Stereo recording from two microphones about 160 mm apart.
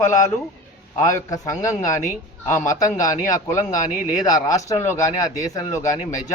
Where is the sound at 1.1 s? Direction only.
20° left (ahead or behind).